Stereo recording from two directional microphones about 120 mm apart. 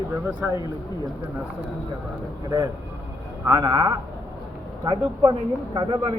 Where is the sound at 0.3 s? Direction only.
15° right (ahead or behind).